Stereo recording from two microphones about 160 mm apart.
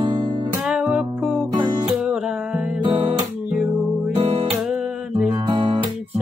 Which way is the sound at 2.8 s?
30° right (ahead or behind).